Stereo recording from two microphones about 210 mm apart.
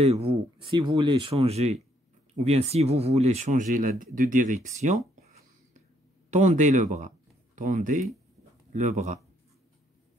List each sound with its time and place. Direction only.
0.0 s speech: 30° right (ahead or behind)
6.3 s speech: 35° right (ahead or behind)